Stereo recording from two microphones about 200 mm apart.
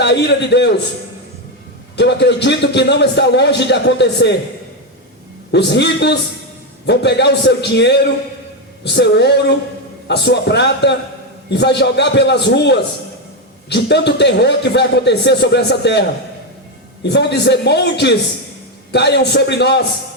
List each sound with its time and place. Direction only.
0.0 s a man's voice: 60° left (ahead or behind)
2.0 s a man's voice: 60° left (ahead or behind)
5.5 s a man's voice: 60° left (ahead or behind)